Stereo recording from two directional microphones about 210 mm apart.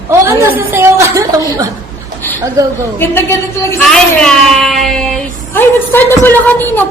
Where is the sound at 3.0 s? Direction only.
10° left (ahead or behind).